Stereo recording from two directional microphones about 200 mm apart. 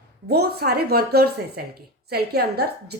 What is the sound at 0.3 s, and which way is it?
A woman's voice, 50° right (ahead or behind).